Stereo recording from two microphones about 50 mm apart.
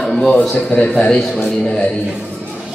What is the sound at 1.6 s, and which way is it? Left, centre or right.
Speech, left.